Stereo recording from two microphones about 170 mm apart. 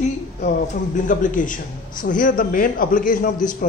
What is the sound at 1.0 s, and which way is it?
Speech, 50° left (ahead or behind).